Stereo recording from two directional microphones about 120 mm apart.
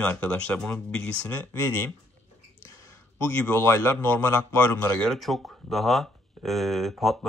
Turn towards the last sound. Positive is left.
turn(degrees=0)  # may be behind; listen again after turning